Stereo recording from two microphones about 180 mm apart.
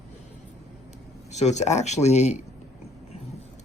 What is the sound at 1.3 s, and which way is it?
Speech, 40° left (ahead or behind).